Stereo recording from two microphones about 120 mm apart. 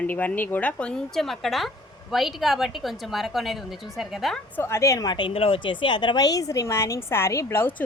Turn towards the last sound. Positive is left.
turn(degrees=15)  # may be behind; listen again after turning